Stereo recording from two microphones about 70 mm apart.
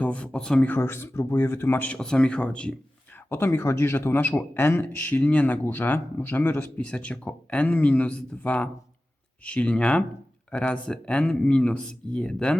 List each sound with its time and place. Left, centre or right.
0.0 s speech: centre
0.8 s speech: left
1.9 s speech: centre
3.2 s speech: left
6.8 s speech: centre